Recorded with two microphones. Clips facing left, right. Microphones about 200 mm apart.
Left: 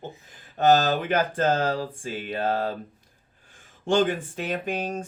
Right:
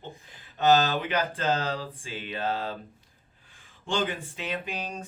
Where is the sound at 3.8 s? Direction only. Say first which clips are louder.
Left 7 dB; 50° left (ahead or behind).